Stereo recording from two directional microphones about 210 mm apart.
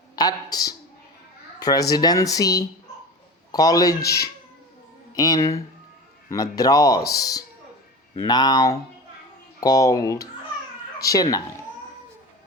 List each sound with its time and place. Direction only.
0.2 s a woman's voice: 20° left (ahead or behind)
5.1 s a man's voice: 15° left (ahead or behind)